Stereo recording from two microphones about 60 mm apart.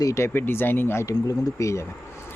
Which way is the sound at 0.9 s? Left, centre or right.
Left.